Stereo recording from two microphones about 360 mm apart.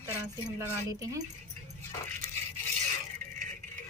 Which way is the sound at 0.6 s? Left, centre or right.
Centre.